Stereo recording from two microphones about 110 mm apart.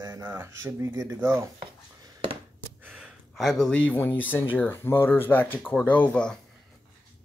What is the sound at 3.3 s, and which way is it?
Speech, 5° left (ahead or behind).